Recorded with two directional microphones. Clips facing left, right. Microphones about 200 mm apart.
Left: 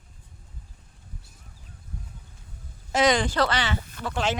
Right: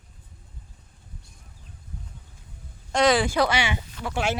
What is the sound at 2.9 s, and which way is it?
Speech, centre (ahead or behind).